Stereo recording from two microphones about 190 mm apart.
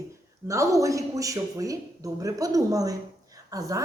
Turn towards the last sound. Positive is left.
turn(degrees=-15)  # may be behind; listen again after turning